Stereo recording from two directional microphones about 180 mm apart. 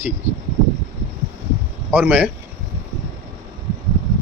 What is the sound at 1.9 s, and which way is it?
Speech, 10° right (ahead or behind).